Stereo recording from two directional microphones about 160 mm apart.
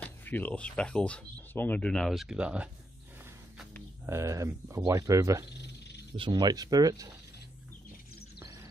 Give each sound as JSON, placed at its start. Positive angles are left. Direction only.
{"t": 0.0, "sound": "speech", "side_deg": 10}
{"t": 4.0, "sound": "speech", "side_deg": -15}